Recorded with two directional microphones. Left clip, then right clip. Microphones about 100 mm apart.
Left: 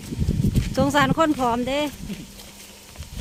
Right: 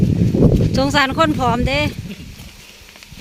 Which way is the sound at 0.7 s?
5° right (ahead or behind).